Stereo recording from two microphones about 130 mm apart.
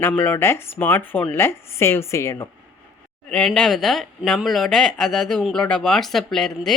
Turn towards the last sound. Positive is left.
turn(degrees=5)  # may be behind; listen again after turning